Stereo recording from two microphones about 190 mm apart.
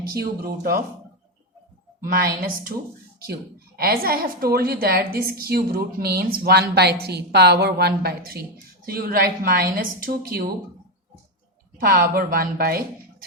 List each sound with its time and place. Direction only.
0.1 s a woman's voice: 50° right (ahead or behind)
2.0 s a woman's voice: 50° right (ahead or behind)
3.8 s a woman's voice: 50° right (ahead or behind)
11.8 s a woman's voice: 50° right (ahead or behind)